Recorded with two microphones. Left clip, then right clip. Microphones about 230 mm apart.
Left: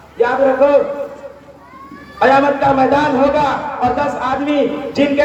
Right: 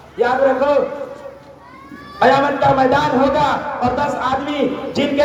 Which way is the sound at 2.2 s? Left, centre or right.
Right.